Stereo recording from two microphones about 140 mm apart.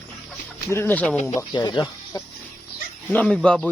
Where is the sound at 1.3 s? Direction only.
30° left (ahead or behind).